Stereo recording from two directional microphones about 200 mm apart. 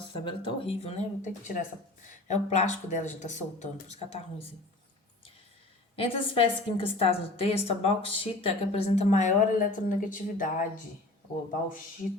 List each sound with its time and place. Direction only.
0.4 s speech: 30° left (ahead or behind)
6.0 s a woman's voice: 25° left (ahead or behind); by 10.7 s 40° left (ahead or behind)